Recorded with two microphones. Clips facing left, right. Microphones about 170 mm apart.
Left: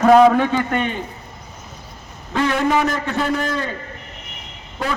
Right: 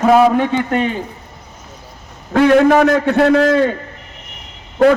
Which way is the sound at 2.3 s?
65° right (ahead or behind).